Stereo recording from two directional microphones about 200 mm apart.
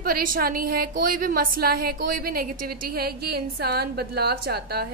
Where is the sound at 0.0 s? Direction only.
45° right (ahead or behind).